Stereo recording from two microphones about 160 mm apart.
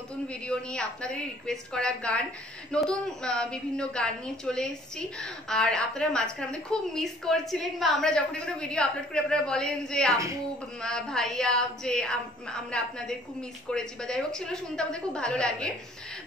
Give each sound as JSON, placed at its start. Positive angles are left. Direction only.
{"t": 0.3, "sound": "a woman's voice", "side_deg": 5}